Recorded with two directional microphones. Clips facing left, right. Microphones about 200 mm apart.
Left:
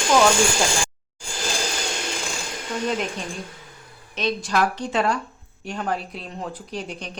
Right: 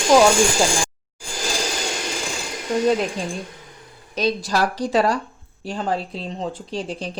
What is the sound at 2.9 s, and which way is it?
Speech, 35° right (ahead or behind).